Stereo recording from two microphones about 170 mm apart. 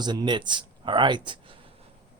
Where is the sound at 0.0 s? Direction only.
25° right (ahead or behind).